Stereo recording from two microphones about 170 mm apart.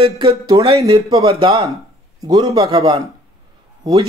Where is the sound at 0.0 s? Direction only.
30° right (ahead or behind).